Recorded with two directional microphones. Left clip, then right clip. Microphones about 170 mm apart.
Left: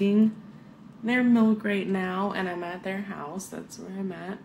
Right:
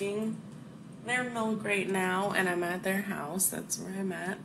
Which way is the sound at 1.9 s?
15° left (ahead or behind).